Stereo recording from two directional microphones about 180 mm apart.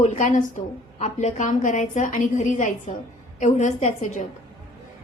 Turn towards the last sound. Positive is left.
turn(degrees=45)  # may be behind; listen again after turning